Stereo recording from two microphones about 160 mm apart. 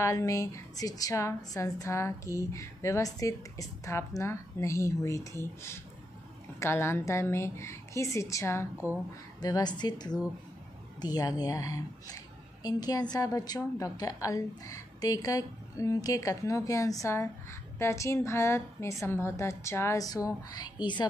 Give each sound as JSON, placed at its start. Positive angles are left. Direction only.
{"t": 0.0, "sound": "a woman's voice", "side_deg": 20}
{"t": 8.7, "sound": "speech", "side_deg": -10}
{"t": 9.4, "sound": "a woman's voice", "side_deg": 25}